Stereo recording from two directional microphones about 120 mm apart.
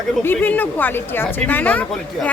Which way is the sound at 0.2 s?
15° left (ahead or behind).